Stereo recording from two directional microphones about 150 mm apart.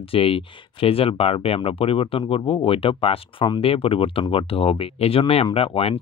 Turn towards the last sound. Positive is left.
turn(degrees=40)  # may be behind; listen again after turning